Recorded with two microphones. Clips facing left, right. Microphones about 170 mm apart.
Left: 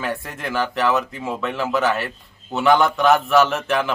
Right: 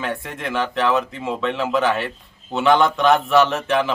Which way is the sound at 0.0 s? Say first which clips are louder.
Even; centre (ahead or behind).